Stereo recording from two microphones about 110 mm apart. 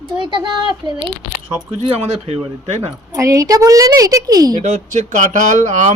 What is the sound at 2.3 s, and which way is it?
Speech, 75° right (ahead or behind).